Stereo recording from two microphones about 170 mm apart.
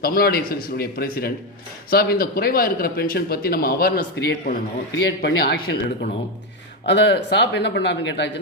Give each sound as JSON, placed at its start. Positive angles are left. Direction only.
{"t": 0.0, "sound": "a man's voice", "side_deg": 60}
{"t": 6.8, "sound": "speech", "side_deg": 90}